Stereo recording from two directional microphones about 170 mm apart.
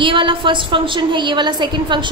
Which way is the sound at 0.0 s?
30° right (ahead or behind).